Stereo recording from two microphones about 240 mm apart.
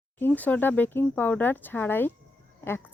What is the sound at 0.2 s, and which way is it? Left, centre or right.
Speech, centre.